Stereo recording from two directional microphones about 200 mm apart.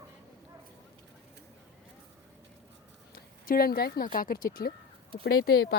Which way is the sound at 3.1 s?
50° left (ahead or behind).